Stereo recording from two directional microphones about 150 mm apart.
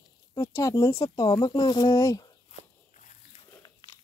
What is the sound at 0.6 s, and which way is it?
A woman's voice, 20° left (ahead or behind).